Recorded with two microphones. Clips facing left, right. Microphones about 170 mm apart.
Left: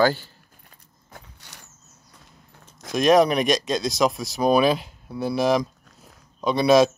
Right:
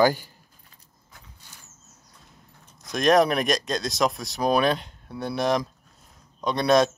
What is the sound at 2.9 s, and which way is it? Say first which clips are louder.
Speech: left 2 dB; centre (ahead or behind).